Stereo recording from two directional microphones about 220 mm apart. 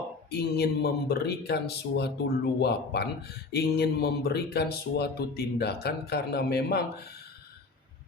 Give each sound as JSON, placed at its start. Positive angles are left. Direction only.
{"t": 0.3, "sound": "a man's voice", "side_deg": 45}